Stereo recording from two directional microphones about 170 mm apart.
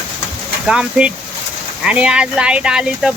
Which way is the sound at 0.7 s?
5° right (ahead or behind).